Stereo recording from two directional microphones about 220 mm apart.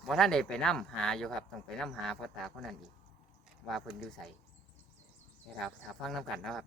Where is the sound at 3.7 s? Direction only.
Centre (ahead or behind).